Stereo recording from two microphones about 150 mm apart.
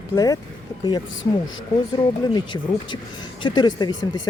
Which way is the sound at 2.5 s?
25° left (ahead or behind).